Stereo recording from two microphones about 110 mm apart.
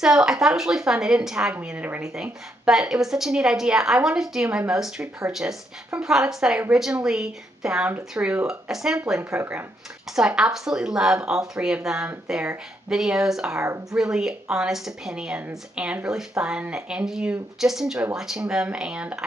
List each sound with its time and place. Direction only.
0.0 s a woman's voice: 5° right (ahead or behind)